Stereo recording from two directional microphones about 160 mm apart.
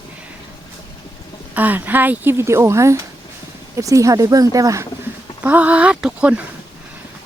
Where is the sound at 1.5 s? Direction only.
10° right (ahead or behind).